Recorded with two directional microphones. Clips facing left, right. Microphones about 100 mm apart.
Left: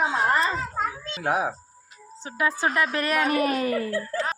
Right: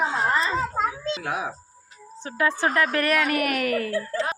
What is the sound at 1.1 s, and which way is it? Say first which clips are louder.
Speech: left 4 dB; 45° left (ahead or behind).